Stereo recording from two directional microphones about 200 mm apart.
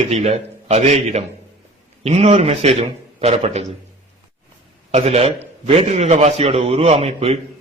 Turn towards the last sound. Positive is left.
turn(degrees=-30)  # may be behind; listen again after turning